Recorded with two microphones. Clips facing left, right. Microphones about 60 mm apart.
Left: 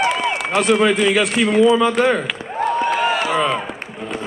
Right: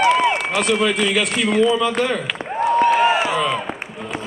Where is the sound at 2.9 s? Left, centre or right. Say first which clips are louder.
Right 3 dB; centre.